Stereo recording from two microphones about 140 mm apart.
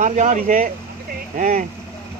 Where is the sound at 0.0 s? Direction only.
60° right (ahead or behind).